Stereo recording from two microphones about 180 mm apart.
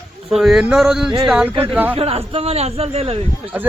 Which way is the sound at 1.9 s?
35° right (ahead or behind).